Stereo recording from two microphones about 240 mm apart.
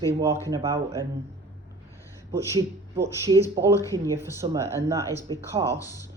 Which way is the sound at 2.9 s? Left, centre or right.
Centre.